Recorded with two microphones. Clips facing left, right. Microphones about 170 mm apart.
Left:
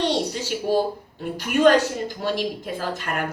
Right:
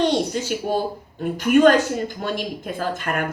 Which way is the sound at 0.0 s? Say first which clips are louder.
Right 3 dB; 50° right (ahead or behind).